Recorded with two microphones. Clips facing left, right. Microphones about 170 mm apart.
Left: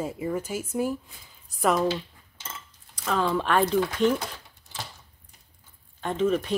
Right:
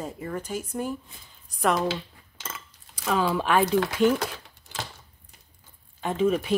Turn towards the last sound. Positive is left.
turn(degrees=-10)  # may be behind; listen again after turning